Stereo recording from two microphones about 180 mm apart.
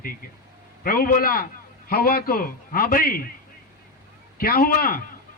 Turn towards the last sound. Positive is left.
turn(degrees=55)  # may be behind; listen again after turning